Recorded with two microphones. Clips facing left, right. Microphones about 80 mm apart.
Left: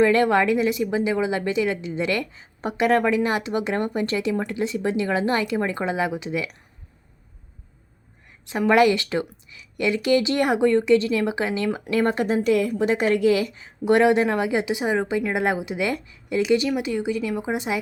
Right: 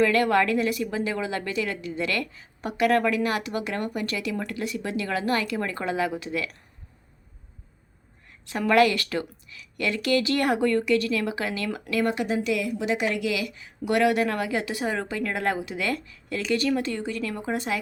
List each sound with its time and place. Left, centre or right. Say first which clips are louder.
0.0 s a woman's voice: left 3 dB; left
8.4 s a woman's voice: left 3 dB; centre